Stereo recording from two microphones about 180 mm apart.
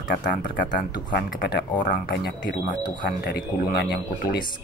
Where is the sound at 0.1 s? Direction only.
50° left (ahead or behind).